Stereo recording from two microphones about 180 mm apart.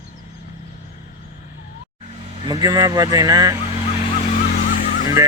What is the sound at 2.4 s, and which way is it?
Speech, 20° right (ahead or behind).